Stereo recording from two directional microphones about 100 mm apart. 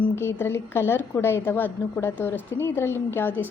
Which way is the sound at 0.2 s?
25° left (ahead or behind).